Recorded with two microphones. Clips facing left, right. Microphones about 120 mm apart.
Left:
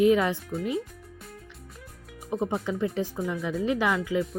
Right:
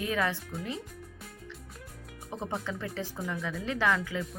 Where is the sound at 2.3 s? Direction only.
15° left (ahead or behind).